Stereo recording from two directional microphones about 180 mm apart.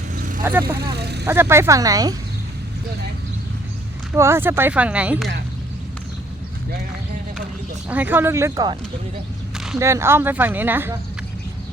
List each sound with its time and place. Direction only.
0.1 s vehicle: 45° right (ahead or behind)
0.8 s speech: 65° right (ahead or behind)
1.2 s speech: 15° right (ahead or behind)
4.1 s speech: 15° right (ahead or behind)
7.9 s speech: 10° right (ahead or behind)